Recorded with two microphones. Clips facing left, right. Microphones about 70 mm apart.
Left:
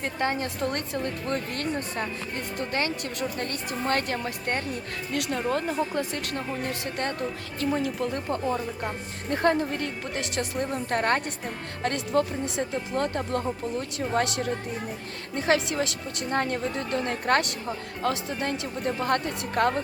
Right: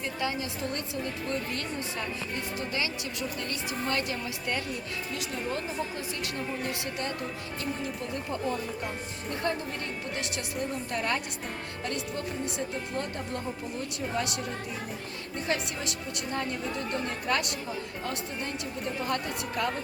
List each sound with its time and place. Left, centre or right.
0.0 s a woman's voice: left
5.1 s a woman's voice: left
6.3 s a woman's voice: left
7.6 s a woman's voice: left
18.0 s a woman's voice: left